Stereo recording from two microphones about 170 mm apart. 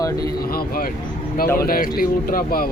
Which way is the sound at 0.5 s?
60° left (ahead or behind).